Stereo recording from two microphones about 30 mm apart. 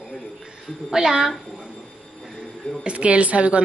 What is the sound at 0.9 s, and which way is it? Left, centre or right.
Speech, centre.